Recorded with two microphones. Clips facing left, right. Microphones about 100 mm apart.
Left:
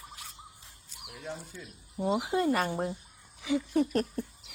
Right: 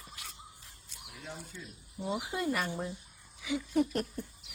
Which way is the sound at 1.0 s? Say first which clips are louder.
Left 5 dB; 65° left (ahead or behind).